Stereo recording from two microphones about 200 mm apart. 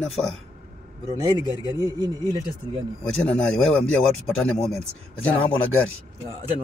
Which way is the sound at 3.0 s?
5° left (ahead or behind).